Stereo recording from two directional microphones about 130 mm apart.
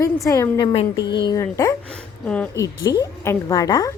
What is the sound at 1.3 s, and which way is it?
Speech, 25° left (ahead or behind).